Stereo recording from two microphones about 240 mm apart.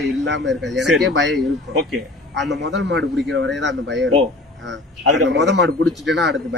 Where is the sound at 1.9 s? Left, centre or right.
Centre.